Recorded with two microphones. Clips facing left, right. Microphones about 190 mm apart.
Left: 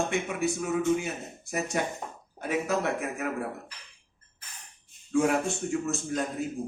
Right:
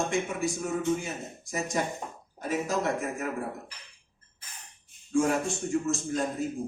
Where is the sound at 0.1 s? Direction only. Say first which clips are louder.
Left 1 dB; 65° left (ahead or behind).